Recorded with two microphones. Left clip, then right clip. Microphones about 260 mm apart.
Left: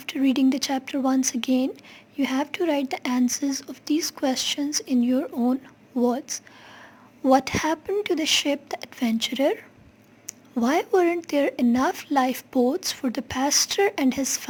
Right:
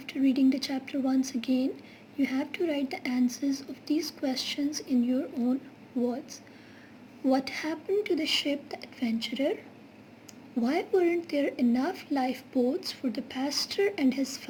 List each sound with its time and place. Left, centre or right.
0.0 s speech: left